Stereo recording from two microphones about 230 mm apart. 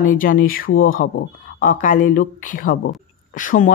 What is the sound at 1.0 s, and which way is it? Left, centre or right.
Speech, left.